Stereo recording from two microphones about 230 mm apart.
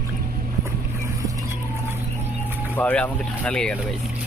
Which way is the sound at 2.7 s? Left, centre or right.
Centre.